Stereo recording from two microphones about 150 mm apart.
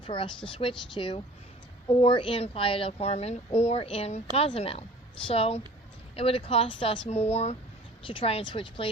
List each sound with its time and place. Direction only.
0.0 s a woman's voice: 35° left (ahead or behind)